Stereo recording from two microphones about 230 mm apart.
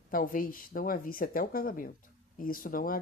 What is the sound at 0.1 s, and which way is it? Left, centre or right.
Speech, left.